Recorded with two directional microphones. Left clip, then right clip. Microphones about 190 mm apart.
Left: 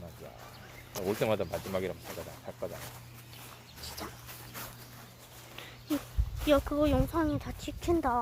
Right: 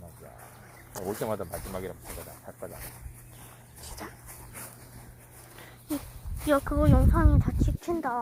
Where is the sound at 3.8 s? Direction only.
15° right (ahead or behind).